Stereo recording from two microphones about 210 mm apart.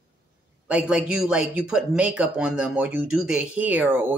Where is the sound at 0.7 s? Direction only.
5° right (ahead or behind).